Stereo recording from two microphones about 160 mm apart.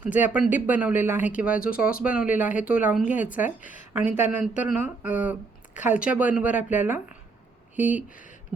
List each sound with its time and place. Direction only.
0.0 s speech: 10° right (ahead or behind)
1.6 s speech: 65° left (ahead or behind)
1.9 s speech: 5° right (ahead or behind)
8.1 s speech: 55° left (ahead or behind)